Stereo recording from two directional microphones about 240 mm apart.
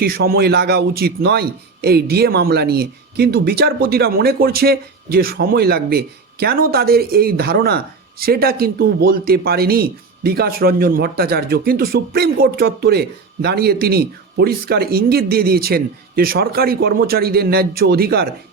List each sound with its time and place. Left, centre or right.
0.0 s a man's voice: right